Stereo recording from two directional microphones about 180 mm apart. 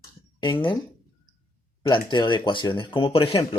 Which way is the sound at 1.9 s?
25° left (ahead or behind).